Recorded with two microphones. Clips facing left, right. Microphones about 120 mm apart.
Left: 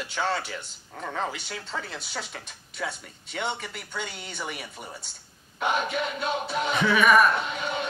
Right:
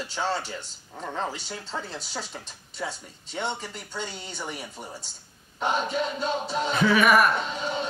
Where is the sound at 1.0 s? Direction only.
15° right (ahead or behind).